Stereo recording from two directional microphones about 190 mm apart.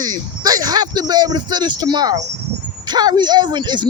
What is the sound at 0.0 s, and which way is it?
Speech, 20° right (ahead or behind).